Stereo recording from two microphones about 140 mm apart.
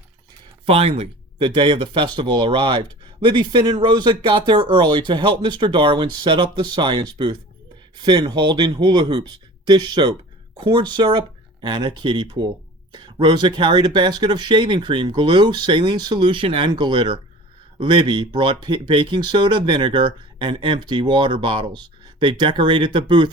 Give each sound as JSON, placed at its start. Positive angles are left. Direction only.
{"t": 0.6, "sound": "speech", "side_deg": -45}